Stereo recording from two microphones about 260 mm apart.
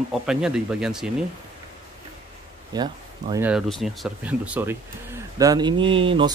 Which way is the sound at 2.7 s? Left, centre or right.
Centre.